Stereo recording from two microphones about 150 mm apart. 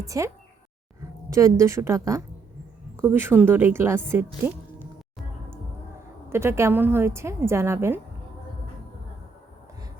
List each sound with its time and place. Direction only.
0.0 s speech: 20° right (ahead or behind)
1.3 s a woman's voice: 20° right (ahead or behind)
6.3 s a woman's voice: 15° right (ahead or behind)